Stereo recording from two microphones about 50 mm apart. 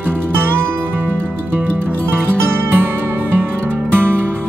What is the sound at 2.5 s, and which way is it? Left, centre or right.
Music, right.